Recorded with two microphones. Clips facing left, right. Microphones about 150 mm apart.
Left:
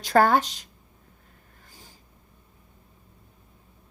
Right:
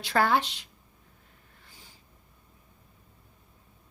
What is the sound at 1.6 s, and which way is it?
Snort, 40° left (ahead or behind).